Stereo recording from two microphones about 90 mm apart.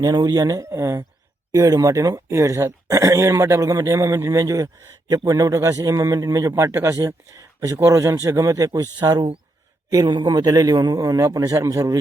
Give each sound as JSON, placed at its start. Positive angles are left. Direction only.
{"t": 0.0, "sound": "a man's voice", "side_deg": -50}